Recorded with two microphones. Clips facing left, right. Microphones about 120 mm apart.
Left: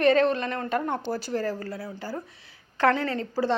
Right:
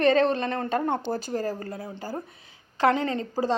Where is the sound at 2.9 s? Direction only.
20° right (ahead or behind).